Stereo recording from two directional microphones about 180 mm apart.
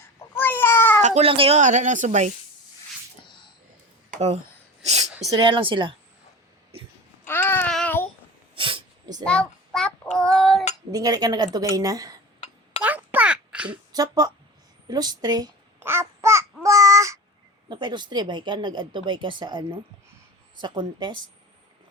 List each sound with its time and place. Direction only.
0.3 s cat: 10° left (ahead or behind)
1.0 s speech: 35° right (ahead or behind)
4.1 s speech: 40° right (ahead or behind)
4.8 s a sound: 40° right (ahead or behind)
5.3 s speech: 30° right (ahead or behind)
7.3 s babbling: 10° left (ahead or behind)
8.5 s a sound: 30° right (ahead or behind)
9.2 s child singing: 5° left (ahead or behind)
10.9 s speech: 20° right (ahead or behind)
12.8 s a sound: 10° right (ahead or behind)
13.9 s speech: 20° right (ahead or behind)
14.8 s babbling: 20° right (ahead or behind)
17.7 s speech: 25° right (ahead or behind)